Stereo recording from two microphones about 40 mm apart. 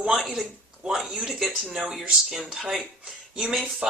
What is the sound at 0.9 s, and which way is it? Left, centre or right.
Speech, centre.